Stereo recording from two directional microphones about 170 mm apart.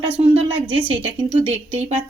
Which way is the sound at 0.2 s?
35° right (ahead or behind).